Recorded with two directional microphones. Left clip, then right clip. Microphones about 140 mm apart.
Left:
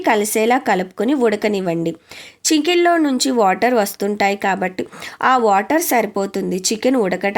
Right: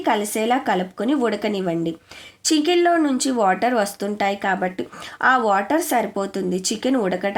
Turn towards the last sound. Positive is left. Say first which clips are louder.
# left 4 dB
turn(degrees=30)  # may be behind; listen again after turning